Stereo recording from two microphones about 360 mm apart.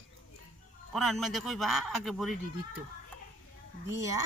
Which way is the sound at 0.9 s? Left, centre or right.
Centre.